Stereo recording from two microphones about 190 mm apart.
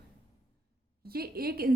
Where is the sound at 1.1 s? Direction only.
55° right (ahead or behind).